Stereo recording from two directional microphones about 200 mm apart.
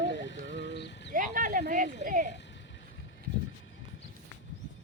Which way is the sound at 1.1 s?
40° right (ahead or behind).